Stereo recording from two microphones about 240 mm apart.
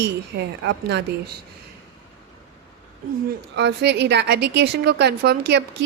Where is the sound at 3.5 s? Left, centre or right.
Right.